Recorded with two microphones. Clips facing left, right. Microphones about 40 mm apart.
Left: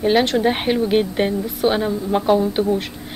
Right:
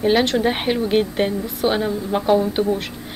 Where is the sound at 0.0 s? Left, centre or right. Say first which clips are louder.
Left 1 dB; centre.